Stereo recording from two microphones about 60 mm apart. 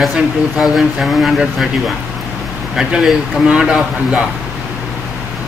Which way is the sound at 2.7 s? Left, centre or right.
Centre.